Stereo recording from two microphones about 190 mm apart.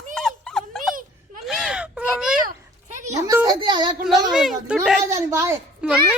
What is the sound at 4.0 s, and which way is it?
A woman's voice, centre (ahead or behind).